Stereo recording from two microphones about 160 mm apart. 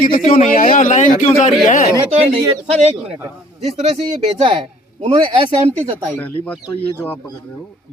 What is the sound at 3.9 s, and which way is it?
Speech, 35° right (ahead or behind).